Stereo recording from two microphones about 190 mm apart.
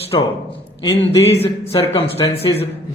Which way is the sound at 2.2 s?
25° left (ahead or behind).